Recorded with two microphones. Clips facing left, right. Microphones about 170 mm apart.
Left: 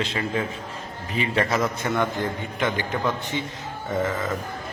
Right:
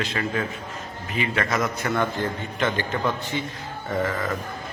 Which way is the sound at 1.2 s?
30° left (ahead or behind).